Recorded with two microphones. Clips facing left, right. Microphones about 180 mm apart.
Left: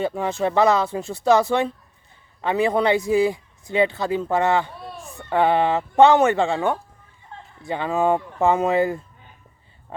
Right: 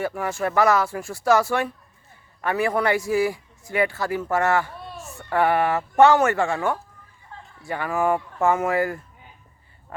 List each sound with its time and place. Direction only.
0.0 s a man's voice: 20° left (ahead or behind)